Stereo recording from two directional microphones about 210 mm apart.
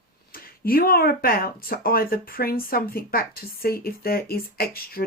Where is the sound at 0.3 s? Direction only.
45° left (ahead or behind).